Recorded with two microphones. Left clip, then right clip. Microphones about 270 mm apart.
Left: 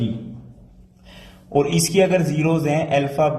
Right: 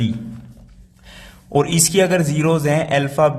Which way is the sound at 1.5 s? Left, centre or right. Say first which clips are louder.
Right 2 dB; right.